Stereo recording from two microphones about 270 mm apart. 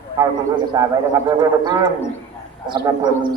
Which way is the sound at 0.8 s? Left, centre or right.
Centre.